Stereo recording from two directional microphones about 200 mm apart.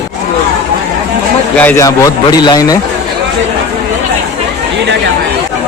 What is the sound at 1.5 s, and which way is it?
A man's voice, 10° left (ahead or behind).